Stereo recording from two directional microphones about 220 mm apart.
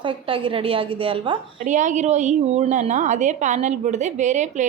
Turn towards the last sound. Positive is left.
turn(degrees=-35)  # may be behind; listen again after turning